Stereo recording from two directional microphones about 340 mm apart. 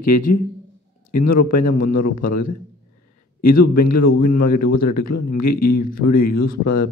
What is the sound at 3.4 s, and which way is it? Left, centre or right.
Speech, left.